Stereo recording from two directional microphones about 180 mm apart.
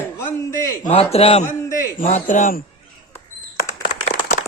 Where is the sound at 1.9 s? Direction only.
45° left (ahead or behind).